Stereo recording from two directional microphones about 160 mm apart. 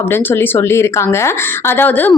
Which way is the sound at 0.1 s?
15° left (ahead or behind).